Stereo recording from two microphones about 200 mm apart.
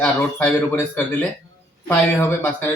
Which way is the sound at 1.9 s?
10° left (ahead or behind).